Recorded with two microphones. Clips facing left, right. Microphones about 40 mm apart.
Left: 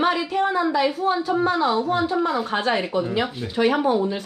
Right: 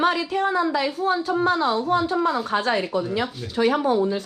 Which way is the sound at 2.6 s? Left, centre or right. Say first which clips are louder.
Even; left.